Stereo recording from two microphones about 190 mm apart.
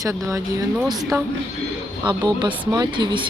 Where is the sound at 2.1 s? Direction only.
25° right (ahead or behind).